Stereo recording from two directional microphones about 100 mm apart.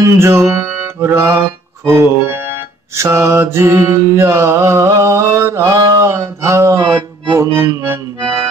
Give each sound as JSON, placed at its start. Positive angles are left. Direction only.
{"t": 0.0, "sound": "mantra", "side_deg": -25}
{"t": 0.7, "sound": "music", "side_deg": -25}
{"t": 1.9, "sound": "mantra", "side_deg": -25}